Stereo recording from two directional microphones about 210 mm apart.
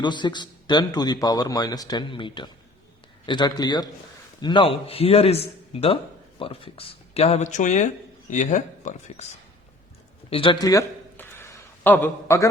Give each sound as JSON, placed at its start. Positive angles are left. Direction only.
{"t": 0.0, "sound": "a man's voice", "side_deg": 20}
{"t": 10.2, "sound": "a man's voice", "side_deg": 25}